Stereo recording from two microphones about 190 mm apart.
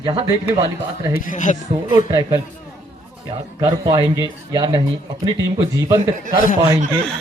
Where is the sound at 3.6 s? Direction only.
20° right (ahead or behind).